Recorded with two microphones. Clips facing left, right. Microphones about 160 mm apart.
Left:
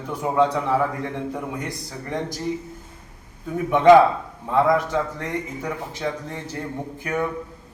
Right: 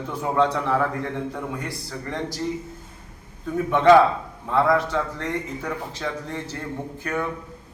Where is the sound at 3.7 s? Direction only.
15° left (ahead or behind).